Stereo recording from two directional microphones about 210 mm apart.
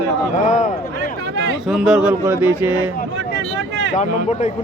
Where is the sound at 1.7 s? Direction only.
5° right (ahead or behind).